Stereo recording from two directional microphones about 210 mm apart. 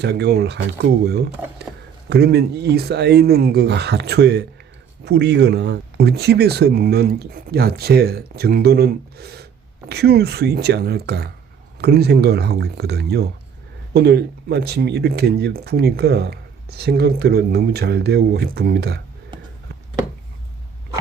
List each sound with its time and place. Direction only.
0.0 s speech: 50° right (ahead or behind)